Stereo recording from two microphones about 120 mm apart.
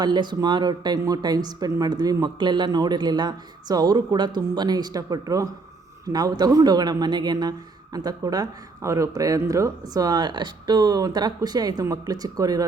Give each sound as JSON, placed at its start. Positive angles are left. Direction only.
{"t": 0.0, "sound": "speech", "side_deg": -40}